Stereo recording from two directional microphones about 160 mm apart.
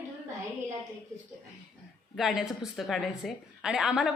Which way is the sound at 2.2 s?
Centre (ahead or behind).